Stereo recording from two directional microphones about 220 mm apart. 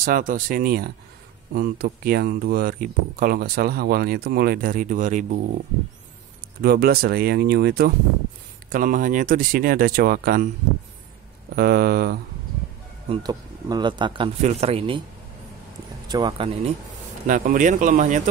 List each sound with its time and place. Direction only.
0.0 s speech: 40° right (ahead or behind)
6.6 s speech: 45° right (ahead or behind)
11.5 s speech: 45° right (ahead or behind)
13.1 s speech: 15° right (ahead or behind)
16.1 s speech: 20° right (ahead or behind)
17.3 s speech: 35° right (ahead or behind)